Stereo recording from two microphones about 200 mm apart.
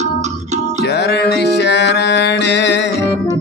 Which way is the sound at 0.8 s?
55° left (ahead or behind).